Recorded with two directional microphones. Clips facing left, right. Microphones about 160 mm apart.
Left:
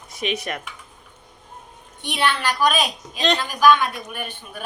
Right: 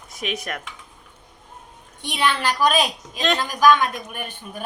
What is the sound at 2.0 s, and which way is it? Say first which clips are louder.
Speech: even; 35° right (ahead or behind).